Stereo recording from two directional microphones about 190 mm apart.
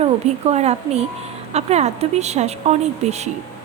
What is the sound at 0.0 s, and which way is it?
A woman's voice, 35° right (ahead or behind).